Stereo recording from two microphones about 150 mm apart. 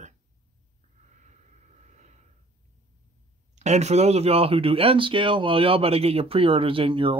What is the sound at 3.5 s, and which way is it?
Speech, 50° right (ahead or behind).